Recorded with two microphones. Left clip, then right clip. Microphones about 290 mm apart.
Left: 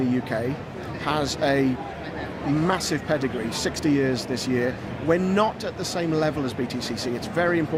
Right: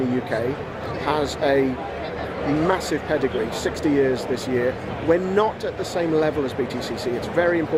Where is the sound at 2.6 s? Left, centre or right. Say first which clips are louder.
Right 1 dB; left.